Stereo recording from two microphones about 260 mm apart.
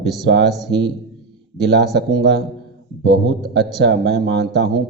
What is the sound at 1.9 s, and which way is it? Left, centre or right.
A man's voice, right.